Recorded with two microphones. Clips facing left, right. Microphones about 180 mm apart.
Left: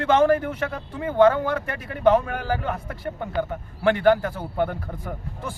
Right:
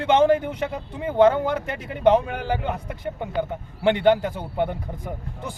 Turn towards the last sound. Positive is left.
turn(degrees=-15)  # may be behind; listen again after turning